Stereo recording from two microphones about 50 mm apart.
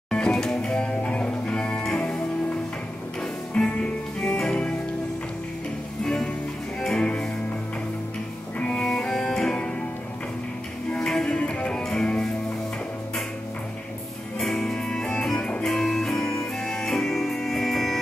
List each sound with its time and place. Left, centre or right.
0.1 s music: centre
6.8 s music: centre
8.5 s music: left
8.8 s music: centre
10.9 s music: centre
11.3 s music: left
11.7 s music: centre
14.4 s music: centre